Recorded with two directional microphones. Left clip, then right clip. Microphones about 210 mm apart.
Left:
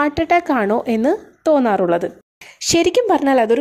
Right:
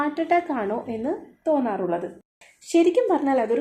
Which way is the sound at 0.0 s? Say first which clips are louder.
Left 6 dB; 35° left (ahead or behind).